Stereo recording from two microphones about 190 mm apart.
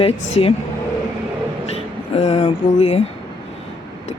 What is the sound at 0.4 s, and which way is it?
Speech, 30° left (ahead or behind).